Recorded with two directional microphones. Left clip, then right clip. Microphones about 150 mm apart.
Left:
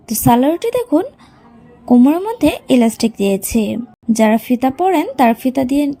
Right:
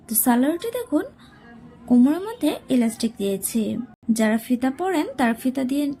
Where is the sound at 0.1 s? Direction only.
35° left (ahead or behind).